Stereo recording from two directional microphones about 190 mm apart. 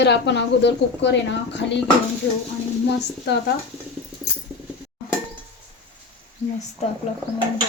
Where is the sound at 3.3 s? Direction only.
65° left (ahead or behind).